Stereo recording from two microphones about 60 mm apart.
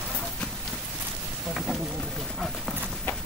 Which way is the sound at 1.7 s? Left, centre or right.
Centre.